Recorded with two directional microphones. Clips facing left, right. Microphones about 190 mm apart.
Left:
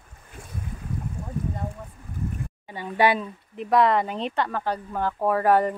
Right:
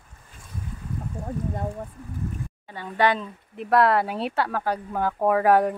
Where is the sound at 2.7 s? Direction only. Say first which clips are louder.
Left 1 dB; 10° left (ahead or behind).